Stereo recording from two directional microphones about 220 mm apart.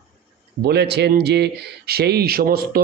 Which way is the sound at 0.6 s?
50° right (ahead or behind).